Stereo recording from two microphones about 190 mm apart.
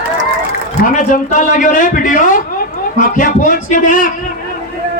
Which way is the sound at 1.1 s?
45° left (ahead or behind).